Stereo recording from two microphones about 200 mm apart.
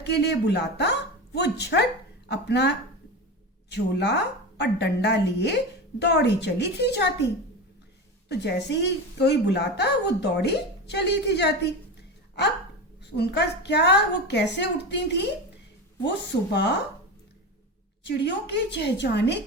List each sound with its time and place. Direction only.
0.0 s a woman's voice: 55° left (ahead or behind)
8.3 s a woman's voice: 55° left (ahead or behind)
13.1 s a woman's voice: 55° left (ahead or behind)
18.0 s a woman's voice: 60° left (ahead or behind)